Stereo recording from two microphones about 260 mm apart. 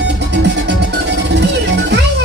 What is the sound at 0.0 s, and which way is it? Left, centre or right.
Music, right.